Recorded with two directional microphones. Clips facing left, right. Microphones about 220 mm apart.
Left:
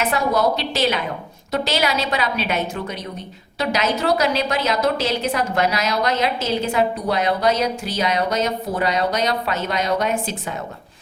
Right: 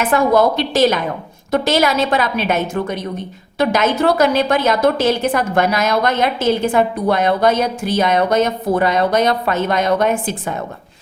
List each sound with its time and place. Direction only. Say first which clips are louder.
0.0 s a woman's voice: right 6 dB; 50° right (ahead or behind)